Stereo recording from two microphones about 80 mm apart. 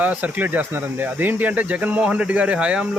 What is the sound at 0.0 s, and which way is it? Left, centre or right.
Speech, right.